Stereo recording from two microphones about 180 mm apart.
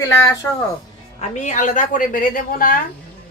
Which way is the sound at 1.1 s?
40° left (ahead or behind).